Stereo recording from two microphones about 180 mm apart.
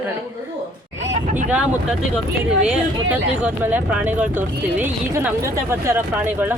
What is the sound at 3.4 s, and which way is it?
A woman's voice, 10° right (ahead or behind).